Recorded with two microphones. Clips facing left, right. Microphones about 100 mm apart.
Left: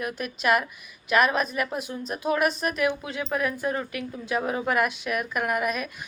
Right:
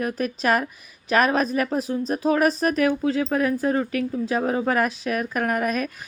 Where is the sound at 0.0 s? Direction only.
35° right (ahead or behind).